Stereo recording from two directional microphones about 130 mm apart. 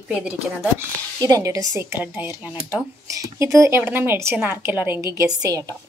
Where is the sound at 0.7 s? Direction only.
25° right (ahead or behind).